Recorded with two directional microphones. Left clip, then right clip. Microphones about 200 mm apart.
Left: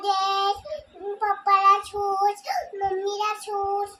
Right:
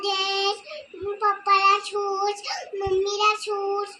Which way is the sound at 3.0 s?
20° left (ahead or behind).